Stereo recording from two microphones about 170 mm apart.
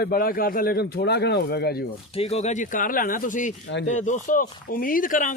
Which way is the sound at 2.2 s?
40° left (ahead or behind).